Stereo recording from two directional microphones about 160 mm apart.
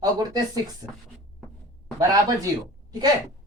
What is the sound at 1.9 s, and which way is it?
Speech, 20° right (ahead or behind).